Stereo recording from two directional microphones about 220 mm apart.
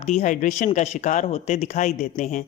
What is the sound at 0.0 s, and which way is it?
A woman's voice, 30° left (ahead or behind).